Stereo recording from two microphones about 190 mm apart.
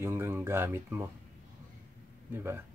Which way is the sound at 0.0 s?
15° right (ahead or behind).